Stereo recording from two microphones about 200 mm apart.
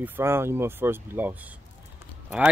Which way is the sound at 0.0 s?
10° right (ahead or behind).